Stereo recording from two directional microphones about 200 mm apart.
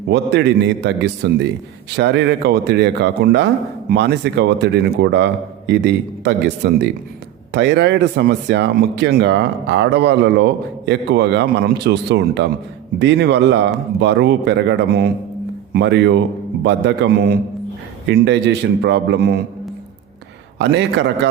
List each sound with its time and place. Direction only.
0.1 s speech: 60° right (ahead or behind)
20.6 s speech: 60° right (ahead or behind)